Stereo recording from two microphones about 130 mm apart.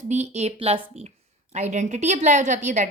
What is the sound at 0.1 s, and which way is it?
A woman's voice, 60° right (ahead or behind).